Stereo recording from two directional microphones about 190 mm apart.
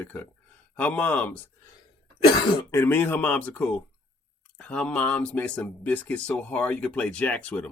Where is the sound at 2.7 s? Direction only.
10° left (ahead or behind).